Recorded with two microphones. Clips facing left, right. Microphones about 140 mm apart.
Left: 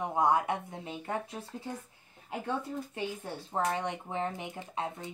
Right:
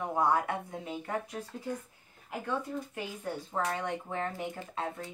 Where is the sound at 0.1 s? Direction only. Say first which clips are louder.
Left 1 dB; 20° left (ahead or behind).